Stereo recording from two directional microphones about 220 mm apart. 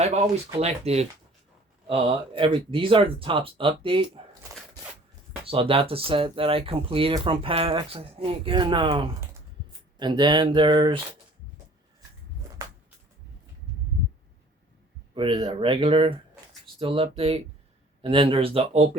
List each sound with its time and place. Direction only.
0.0 s speech: 30° right (ahead or behind)
5.5 s speech: 25° right (ahead or behind)
15.1 s speech: 25° right (ahead or behind)